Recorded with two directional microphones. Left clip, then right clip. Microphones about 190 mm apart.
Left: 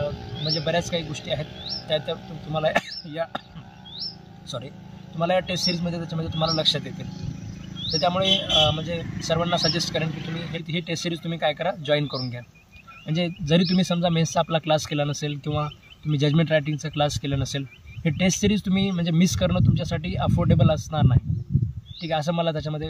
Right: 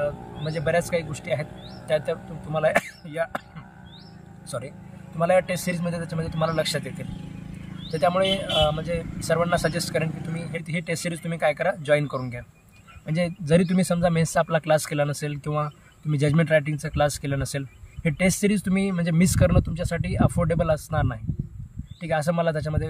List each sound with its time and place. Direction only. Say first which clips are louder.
0.7 s speech: right 5 dB; 5° right (ahead or behind)
5.2 s speech: right 2 dB; 5° right (ahead or behind)
7.9 s speech: even; centre (ahead or behind)
10.0 s speech: left 2 dB; 55° right (ahead or behind)
10.5 s speech: right 1 dB; 5° right (ahead or behind)